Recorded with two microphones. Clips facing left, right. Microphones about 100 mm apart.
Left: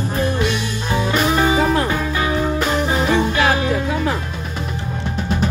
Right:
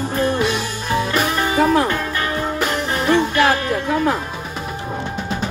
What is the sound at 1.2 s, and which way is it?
Music, 15° left (ahead or behind).